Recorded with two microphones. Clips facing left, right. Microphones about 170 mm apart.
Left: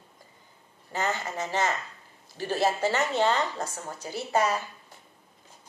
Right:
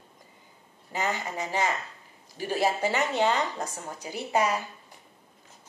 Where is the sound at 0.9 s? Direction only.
15° right (ahead or behind).